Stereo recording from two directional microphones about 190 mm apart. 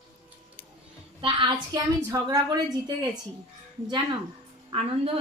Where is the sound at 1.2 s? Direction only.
25° right (ahead or behind).